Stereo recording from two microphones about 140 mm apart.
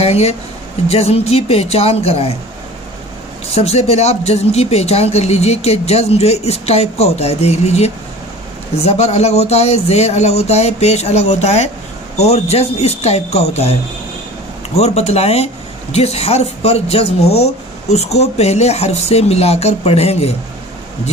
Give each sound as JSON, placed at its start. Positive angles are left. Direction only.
{"t": 0.0, "sound": "speech", "side_deg": 45}
{"t": 3.5, "sound": "speech", "side_deg": 50}